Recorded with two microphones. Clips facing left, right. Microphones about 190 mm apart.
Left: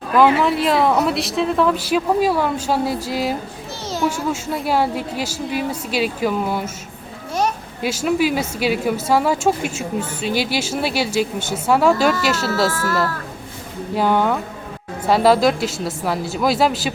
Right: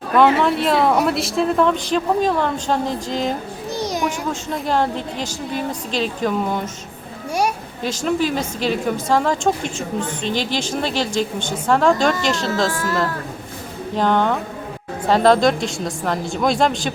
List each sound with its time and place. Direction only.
0.1 s a woman's voice: centre (ahead or behind)
3.8 s a sound: 15° right (ahead or behind)
4.3 s a woman's voice: 5° left (ahead or behind)
7.8 s a woman's voice: 10° left (ahead or behind)
12.7 s speech: 15° right (ahead or behind)
13.9 s a woman's voice: 10° left (ahead or behind)